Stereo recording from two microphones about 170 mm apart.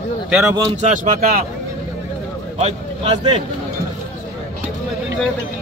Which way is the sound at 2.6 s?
35° right (ahead or behind).